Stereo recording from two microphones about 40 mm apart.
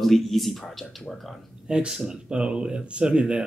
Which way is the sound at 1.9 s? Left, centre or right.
Centre.